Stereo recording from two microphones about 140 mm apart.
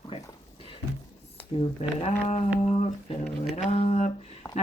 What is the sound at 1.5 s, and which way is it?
Speech, 45° left (ahead or behind).